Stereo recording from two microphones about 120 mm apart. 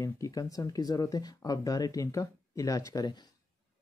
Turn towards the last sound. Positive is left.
turn(degrees=35)  # may be behind; listen again after turning